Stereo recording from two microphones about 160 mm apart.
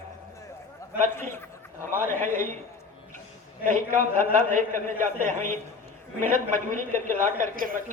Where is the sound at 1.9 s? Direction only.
55° right (ahead or behind).